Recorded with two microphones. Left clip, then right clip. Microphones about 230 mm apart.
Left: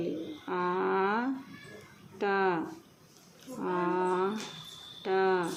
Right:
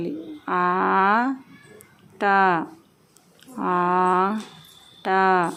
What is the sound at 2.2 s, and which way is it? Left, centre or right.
Speech, right.